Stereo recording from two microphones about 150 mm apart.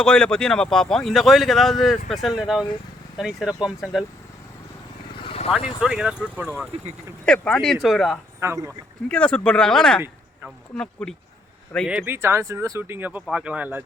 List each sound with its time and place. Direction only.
0.0 s speech: 5° left (ahead or behind)
5.2 s vehicle: 40° left (ahead or behind)
5.5 s speech: 5° right (ahead or behind)
7.3 s speech: 5° left (ahead or behind)
8.4 s speech: 20° right (ahead or behind)
9.0 s speech: 5° left (ahead or behind)
11.0 s speech: 5° left (ahead or behind)
11.9 s speech: 10° right (ahead or behind)